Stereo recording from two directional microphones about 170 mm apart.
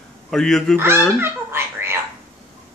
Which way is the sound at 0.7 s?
15° right (ahead or behind).